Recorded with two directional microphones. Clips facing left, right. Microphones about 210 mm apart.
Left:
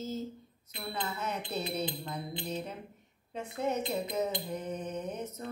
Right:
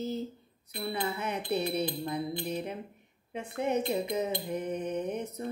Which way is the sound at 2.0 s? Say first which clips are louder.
Right 5 dB; 15° right (ahead or behind).